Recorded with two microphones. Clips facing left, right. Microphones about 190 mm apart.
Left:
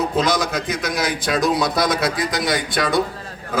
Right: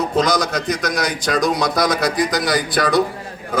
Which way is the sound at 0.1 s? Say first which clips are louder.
Right 2 dB; centre (ahead or behind).